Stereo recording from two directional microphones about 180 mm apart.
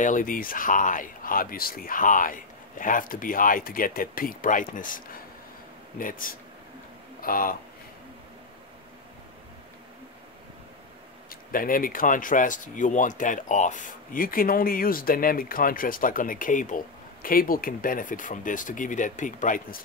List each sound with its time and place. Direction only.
0.0 s speech: 45° left (ahead or behind)
11.2 s speech: 50° left (ahead or behind)